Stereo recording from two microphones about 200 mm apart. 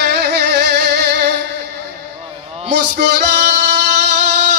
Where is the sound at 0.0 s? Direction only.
55° right (ahead or behind).